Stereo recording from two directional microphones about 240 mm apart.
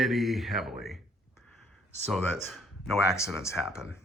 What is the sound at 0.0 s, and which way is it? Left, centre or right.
Speech, centre.